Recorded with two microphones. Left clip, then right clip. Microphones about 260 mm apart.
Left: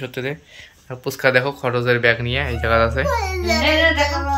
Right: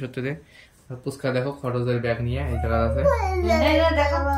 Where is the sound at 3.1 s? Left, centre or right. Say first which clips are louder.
Even; centre.